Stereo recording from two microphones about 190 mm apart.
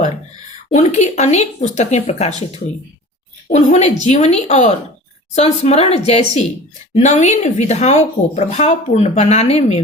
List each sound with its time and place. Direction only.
0.7 s a woman's voice: 40° left (ahead or behind)
3.5 s a woman's voice: 35° left (ahead or behind)